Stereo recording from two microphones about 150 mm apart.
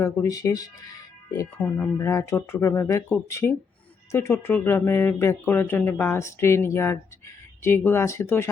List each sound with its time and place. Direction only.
0.0 s speech: 20° left (ahead or behind)
1.5 s speech: 5° left (ahead or behind)
2.0 s speech: 20° left (ahead or behind)